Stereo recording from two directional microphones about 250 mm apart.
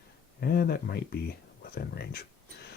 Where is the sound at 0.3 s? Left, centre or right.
Left.